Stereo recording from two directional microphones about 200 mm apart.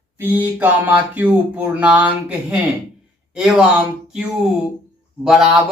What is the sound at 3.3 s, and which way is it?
Speech, 5° right (ahead or behind).